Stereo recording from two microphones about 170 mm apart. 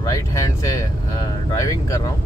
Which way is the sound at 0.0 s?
20° left (ahead or behind).